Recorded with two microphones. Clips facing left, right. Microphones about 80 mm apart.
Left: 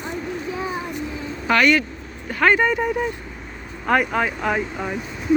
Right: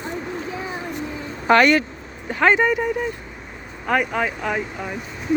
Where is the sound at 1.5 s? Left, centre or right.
Right.